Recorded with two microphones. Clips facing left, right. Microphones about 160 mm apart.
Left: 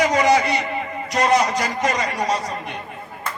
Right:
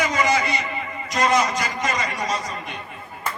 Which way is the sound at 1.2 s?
65° left (ahead or behind).